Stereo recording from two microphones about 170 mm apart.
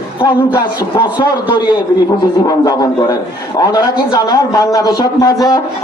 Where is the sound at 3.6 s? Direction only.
20° left (ahead or behind).